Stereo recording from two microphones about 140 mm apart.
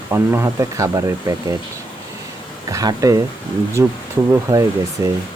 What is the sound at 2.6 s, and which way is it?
Speech, 25° right (ahead or behind).